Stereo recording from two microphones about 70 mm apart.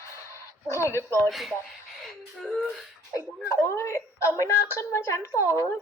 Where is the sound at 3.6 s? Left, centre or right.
Left.